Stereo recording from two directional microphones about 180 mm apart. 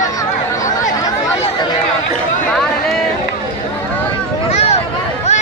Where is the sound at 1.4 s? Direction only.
25° left (ahead or behind).